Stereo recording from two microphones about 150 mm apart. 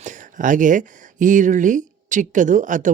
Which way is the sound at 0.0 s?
60° right (ahead or behind).